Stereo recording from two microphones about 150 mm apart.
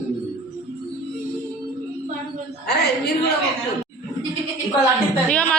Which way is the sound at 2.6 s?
90° left.